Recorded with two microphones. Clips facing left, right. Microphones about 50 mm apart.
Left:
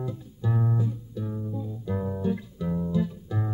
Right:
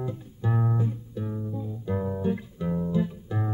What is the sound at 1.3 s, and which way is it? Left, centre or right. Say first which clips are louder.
Music: even; centre.